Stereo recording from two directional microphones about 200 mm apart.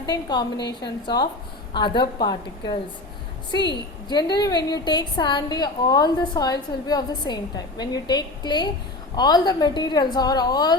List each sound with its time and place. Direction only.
0.0 s a woman's voice: 20° left (ahead or behind)